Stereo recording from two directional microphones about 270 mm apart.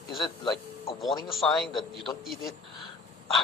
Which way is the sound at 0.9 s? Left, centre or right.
Centre.